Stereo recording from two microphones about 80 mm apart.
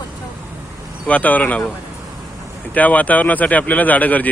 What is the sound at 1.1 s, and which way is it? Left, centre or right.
Speech, centre.